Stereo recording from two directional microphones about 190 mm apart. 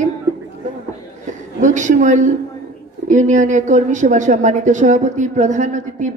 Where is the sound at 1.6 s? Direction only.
40° right (ahead or behind).